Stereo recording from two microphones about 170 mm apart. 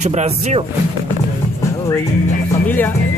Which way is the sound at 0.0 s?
45° right (ahead or behind).